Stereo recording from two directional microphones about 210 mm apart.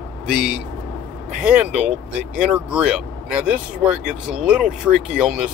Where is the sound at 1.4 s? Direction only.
5° right (ahead or behind).